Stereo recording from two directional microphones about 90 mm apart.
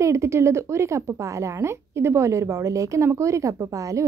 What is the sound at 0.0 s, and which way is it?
Speech, 30° right (ahead or behind).